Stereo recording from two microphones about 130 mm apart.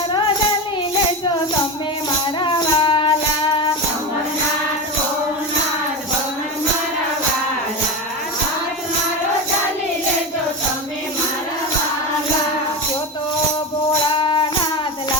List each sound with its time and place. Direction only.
2.4 s music: 40° left (ahead or behind)
14.2 s music: 40° left (ahead or behind)